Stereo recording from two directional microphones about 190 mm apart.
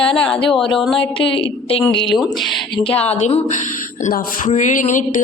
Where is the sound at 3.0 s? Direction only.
35° left (ahead or behind).